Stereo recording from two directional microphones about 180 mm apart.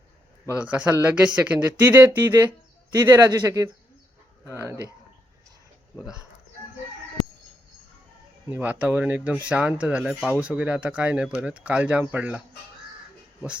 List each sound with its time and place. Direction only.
0.7 s a man's voice: 10° right (ahead or behind)
8.4 s speech: 10° right (ahead or behind)